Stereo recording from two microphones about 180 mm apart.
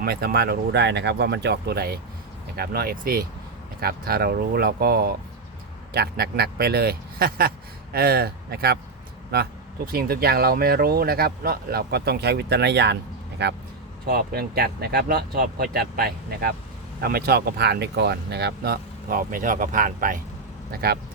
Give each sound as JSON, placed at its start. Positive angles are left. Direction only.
{"t": 0.0, "sound": "speech", "side_deg": -60}
{"t": 14.1, "sound": "speech", "side_deg": -55}